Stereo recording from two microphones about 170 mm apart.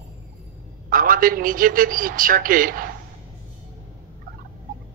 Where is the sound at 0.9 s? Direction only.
55° right (ahead or behind).